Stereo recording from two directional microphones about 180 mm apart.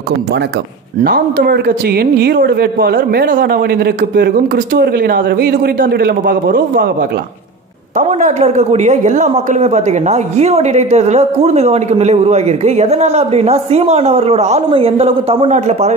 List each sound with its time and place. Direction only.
1.0 s a man's voice: 60° right (ahead or behind)
8.1 s a man's voice: 40° right (ahead or behind)